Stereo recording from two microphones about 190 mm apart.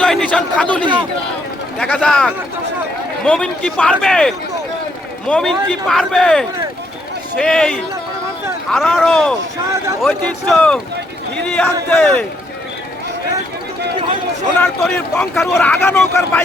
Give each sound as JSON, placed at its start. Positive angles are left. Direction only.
{"t": 0.0, "sound": "a man's voice", "side_deg": 5}
{"t": 9.6, "sound": "speech", "side_deg": -15}
{"t": 10.4, "sound": "a man's voice", "side_deg": 5}
{"t": 14.6, "sound": "speech", "side_deg": 10}